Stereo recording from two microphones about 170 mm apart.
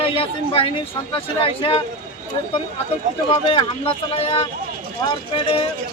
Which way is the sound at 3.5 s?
30° left (ahead or behind).